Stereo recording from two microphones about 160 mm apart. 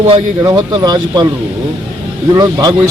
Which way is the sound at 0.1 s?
20° right (ahead or behind).